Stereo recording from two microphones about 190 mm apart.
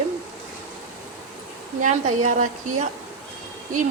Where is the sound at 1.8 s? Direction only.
40° right (ahead or behind).